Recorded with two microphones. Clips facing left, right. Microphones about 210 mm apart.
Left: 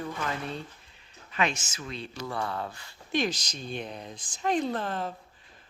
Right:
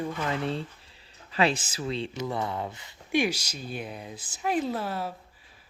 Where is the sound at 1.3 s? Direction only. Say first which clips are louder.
Right 4 dB; 35° right (ahead or behind); by 5.1 s 10° right (ahead or behind).